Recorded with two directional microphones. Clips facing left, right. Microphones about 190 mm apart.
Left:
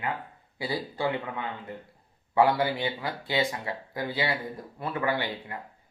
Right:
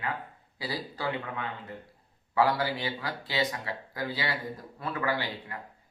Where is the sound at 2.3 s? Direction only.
25° left (ahead or behind).